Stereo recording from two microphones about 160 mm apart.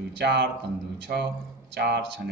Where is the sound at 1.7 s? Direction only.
90° right.